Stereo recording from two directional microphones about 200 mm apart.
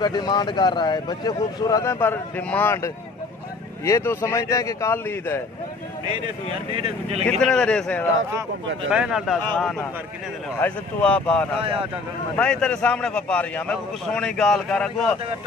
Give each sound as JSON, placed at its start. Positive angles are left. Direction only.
{"t": 0.0, "sound": "a man's voice", "side_deg": 20}
{"t": 6.2, "sound": "speech", "side_deg": -25}
{"t": 7.2, "sound": "a man's voice", "side_deg": 5}